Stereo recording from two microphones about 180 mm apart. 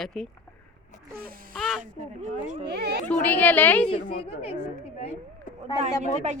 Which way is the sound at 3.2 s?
10° left (ahead or behind).